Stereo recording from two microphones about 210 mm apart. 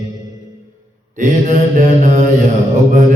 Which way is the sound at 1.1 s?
35° right (ahead or behind).